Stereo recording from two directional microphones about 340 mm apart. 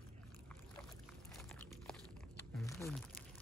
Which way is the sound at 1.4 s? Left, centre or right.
Centre.